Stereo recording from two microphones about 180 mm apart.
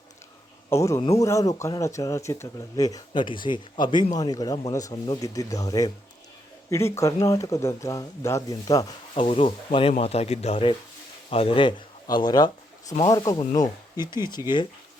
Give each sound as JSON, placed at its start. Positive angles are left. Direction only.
{"t": 0.7, "sound": "speech", "side_deg": 15}